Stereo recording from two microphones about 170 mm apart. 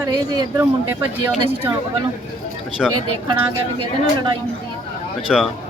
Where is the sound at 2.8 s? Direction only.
Centre (ahead or behind).